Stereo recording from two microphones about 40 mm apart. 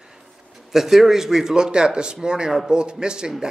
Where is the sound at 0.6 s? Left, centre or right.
Centre.